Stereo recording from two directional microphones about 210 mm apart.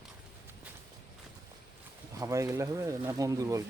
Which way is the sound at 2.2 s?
15° right (ahead or behind).